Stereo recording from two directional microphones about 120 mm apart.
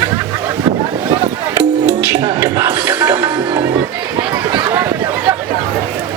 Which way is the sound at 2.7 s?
15° right (ahead or behind).